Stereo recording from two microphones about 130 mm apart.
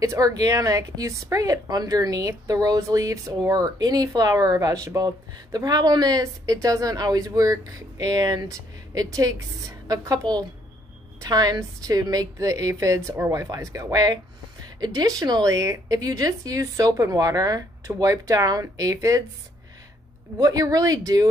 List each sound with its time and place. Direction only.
0.0 s speech: 25° right (ahead or behind)
20.3 s speech: 30° right (ahead or behind)